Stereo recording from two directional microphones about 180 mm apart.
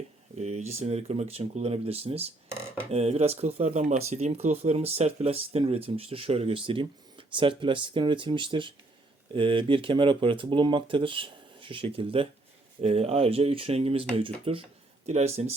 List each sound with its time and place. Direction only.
0.3 s speech: 40° right (ahead or behind)